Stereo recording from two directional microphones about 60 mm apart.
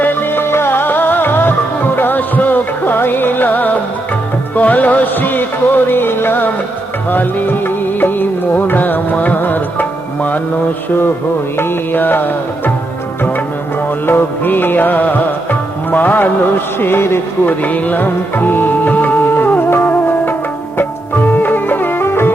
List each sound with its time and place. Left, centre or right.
0.0 s music: left
11.5 s music: left
14.1 s music: left
17.4 s music: left